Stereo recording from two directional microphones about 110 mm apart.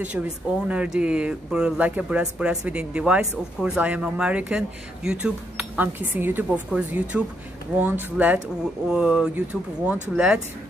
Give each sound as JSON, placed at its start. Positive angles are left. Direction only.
{"t": 0.7, "sound": "speech", "side_deg": -10}